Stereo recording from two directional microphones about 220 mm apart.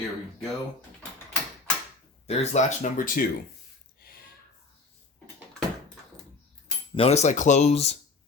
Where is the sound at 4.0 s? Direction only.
45° left (ahead or behind).